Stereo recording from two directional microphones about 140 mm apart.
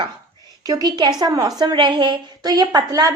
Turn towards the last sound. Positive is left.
turn(degrees=-25)  # may be behind; listen again after turning